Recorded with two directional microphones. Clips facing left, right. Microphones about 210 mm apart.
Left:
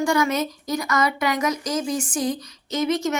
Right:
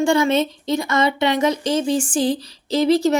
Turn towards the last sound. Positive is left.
turn(degrees=-35)  # may be behind; listen again after turning